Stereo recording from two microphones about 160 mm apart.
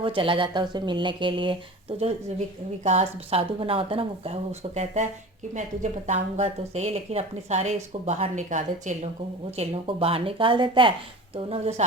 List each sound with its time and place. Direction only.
0.0 s a woman's voice: 35° right (ahead or behind); by 9.0 s 50° right (ahead or behind)
9.6 s a woman's voice: 35° right (ahead or behind)